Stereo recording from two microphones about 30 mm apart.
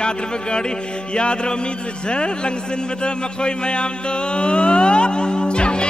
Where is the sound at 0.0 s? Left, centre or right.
Left.